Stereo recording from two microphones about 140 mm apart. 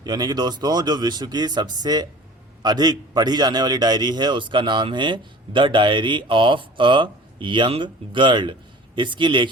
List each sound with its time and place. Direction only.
0.0 s a man's voice: 30° right (ahead or behind)